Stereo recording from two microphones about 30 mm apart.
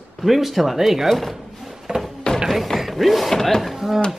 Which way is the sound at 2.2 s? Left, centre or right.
Left.